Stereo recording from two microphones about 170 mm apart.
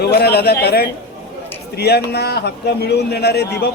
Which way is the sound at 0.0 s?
70° left (ahead or behind).